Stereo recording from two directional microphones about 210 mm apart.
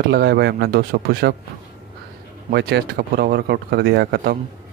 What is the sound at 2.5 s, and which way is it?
Speech, 50° right (ahead or behind).